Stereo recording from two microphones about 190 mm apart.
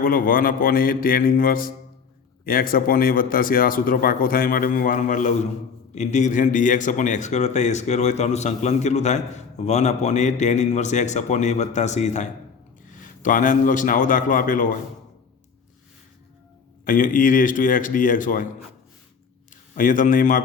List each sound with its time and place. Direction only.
0.0 s a man's voice: 50° left (ahead or behind)
16.8 s a man's voice: 45° left (ahead or behind)
19.7 s a man's voice: 45° left (ahead or behind)